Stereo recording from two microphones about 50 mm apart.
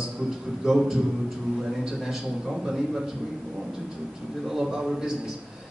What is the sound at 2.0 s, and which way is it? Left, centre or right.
Speech, centre.